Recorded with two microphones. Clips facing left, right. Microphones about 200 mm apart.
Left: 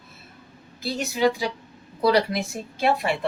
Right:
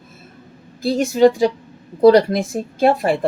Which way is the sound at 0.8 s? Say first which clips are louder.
Right 9 dB; 50° right (ahead or behind).